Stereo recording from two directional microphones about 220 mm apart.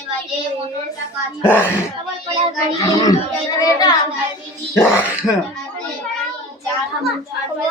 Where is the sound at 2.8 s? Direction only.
15° left (ahead or behind).